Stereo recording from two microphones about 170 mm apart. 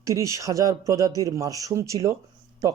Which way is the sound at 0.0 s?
20° right (ahead or behind).